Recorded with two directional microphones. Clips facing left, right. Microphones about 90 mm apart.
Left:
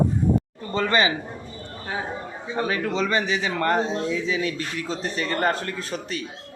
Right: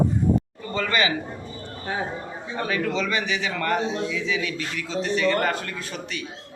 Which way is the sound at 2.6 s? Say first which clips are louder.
Even; 35° left (ahead or behind).